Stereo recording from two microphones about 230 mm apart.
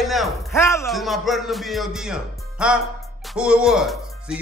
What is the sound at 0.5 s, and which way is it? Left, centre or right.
Speech, centre.